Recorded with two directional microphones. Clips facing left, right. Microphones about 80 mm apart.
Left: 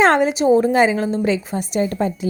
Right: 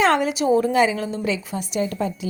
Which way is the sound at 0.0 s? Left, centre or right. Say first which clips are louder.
Left 4 dB; left.